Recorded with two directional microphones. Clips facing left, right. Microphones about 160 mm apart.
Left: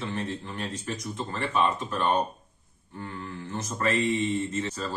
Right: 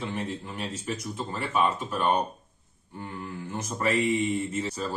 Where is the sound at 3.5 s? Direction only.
10° right (ahead or behind).